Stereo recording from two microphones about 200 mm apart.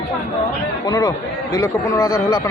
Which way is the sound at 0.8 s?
15° left (ahead or behind).